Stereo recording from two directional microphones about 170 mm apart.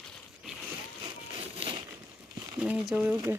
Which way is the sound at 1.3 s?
30° right (ahead or behind).